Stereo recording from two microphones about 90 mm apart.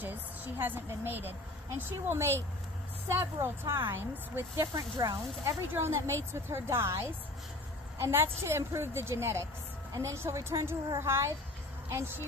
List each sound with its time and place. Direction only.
0.0 s a woman's voice: 20° right (ahead or behind)
4.7 s speech: 40° right (ahead or behind)
5.7 s a woman's voice: 30° right (ahead or behind)